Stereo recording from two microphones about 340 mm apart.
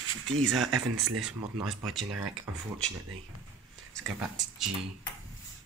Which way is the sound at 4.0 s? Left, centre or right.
Centre.